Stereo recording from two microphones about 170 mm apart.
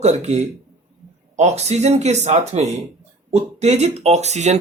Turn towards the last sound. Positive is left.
turn(degrees=-45)  # may be behind; listen again after turning